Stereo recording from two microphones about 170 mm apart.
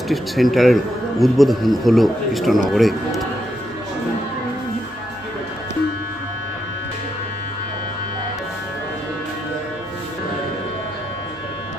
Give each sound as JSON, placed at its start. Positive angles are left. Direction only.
{"t": 0.1, "sound": "speech", "side_deg": 0}